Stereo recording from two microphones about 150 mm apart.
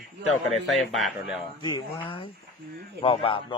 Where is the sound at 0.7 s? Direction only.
Centre (ahead or behind).